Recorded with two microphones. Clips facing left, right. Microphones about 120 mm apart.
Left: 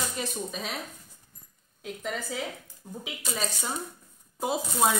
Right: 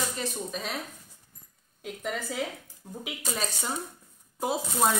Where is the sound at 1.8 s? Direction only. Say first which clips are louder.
Even; 5° right (ahead or behind).